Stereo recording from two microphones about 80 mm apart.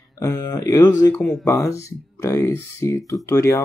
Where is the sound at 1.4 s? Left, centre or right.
Left.